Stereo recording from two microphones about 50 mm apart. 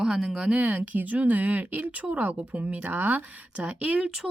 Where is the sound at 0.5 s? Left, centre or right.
Right.